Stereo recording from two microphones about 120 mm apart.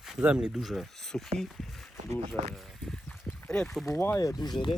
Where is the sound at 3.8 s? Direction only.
25° left (ahead or behind).